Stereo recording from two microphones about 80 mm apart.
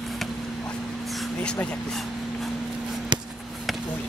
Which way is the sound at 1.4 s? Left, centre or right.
Centre.